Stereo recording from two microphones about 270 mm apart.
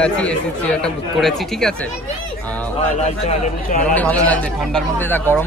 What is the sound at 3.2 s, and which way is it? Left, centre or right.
Speech, left.